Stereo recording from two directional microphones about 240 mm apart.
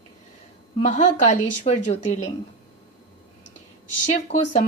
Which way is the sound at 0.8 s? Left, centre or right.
Left.